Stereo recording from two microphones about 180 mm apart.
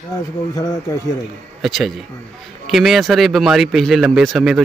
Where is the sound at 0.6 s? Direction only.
20° left (ahead or behind).